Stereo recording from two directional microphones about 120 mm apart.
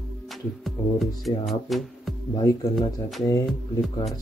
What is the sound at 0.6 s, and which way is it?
Speech, centre (ahead or behind).